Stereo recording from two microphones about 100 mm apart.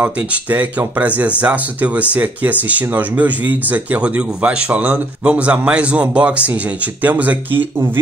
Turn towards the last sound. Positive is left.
turn(degrees=-20)  # may be behind; listen again after turning